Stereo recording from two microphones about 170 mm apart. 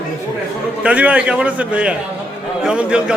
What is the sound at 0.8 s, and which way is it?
A man's voice, 5° right (ahead or behind).